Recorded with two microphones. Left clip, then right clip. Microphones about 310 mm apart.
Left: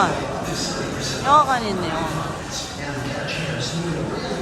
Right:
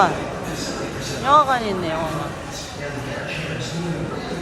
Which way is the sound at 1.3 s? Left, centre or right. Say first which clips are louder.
Right 1 dB; centre.